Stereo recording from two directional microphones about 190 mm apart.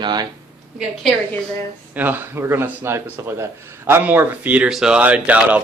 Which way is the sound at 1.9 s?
10° right (ahead or behind).